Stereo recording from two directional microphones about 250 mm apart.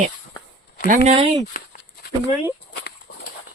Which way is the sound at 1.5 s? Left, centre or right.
Left.